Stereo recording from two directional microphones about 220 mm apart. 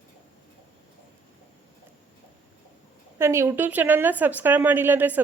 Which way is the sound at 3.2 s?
10° right (ahead or behind).